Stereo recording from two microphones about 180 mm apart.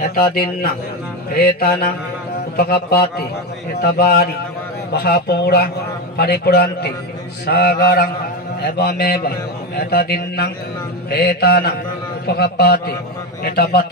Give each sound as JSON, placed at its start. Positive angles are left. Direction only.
{"t": 0.0, "sound": "a man's voice", "side_deg": 55}